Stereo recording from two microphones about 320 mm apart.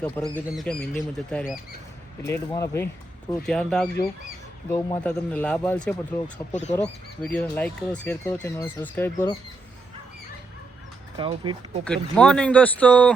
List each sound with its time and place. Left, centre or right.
0.0 s speech: centre
6.5 s speech: left
6.7 s speech: centre
11.2 s speech: centre
11.9 s speech: centre